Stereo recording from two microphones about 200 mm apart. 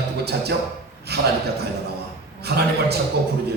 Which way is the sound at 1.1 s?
55° right (ahead or behind).